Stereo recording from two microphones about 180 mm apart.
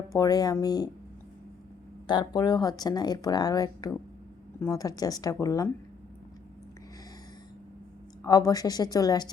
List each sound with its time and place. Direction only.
0.1 s speech: 20° left (ahead or behind)
2.0 s speech: 25° left (ahead or behind)
8.2 s speech: 20° left (ahead or behind)